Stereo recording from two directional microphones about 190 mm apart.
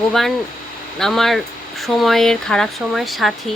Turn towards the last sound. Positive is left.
turn(degrees=0)  # may be behind; listen again after turning